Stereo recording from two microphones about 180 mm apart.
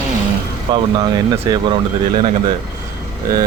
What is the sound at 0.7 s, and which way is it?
Speech, 25° right (ahead or behind).